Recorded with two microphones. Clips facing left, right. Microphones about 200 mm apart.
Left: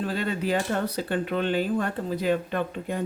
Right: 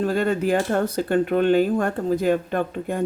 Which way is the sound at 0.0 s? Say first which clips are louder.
Right 7 dB; 50° right (ahead or behind).